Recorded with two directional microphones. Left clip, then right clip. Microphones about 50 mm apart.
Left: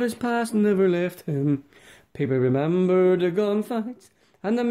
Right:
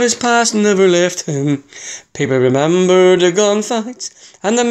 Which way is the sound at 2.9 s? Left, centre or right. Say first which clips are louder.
Right 10 dB; left.